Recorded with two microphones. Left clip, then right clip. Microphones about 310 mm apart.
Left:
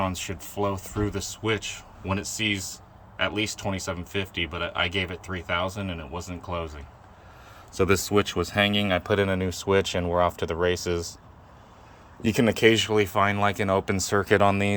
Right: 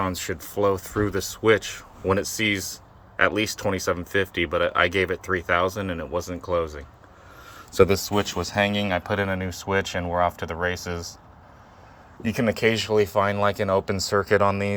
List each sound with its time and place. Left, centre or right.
0.0 s speech: centre
7.9 s speech: centre
8.1 s speech: centre
12.2 s speech: centre